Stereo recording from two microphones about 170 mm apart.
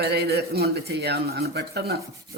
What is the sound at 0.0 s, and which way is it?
Speech, 75° right (ahead or behind).